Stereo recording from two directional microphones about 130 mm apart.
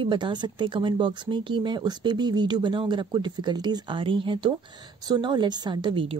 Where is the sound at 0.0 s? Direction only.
35° right (ahead or behind).